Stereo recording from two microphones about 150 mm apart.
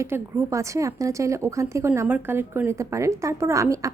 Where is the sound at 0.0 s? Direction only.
20° right (ahead or behind).